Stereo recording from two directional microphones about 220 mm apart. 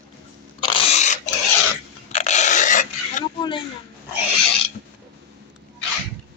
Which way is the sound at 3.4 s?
20° left (ahead or behind).